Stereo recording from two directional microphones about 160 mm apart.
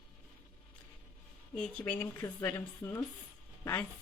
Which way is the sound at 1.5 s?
10° left (ahead or behind).